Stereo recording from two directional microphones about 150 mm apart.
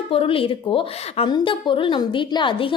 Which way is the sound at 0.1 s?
35° left (ahead or behind).